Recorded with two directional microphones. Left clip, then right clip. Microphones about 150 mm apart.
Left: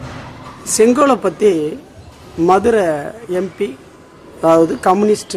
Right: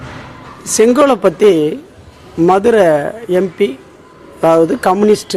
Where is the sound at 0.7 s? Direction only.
25° right (ahead or behind).